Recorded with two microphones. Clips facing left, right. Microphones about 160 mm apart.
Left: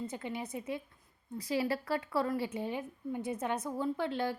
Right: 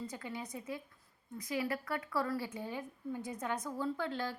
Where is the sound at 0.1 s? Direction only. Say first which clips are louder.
Left 4 dB; 25° left (ahead or behind).